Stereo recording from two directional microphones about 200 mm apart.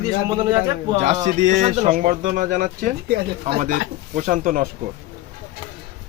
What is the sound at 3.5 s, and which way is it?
Speech, 40° right (ahead or behind).